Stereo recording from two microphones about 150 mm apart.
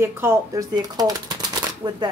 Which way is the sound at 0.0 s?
15° right (ahead or behind).